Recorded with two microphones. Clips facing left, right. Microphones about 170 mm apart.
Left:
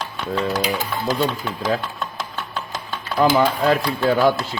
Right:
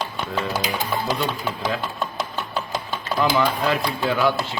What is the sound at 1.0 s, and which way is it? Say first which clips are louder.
Speech: left 3 dB; centre (ahead or behind).